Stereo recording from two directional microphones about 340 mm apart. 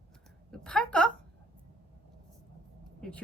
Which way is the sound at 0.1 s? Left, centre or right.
Centre.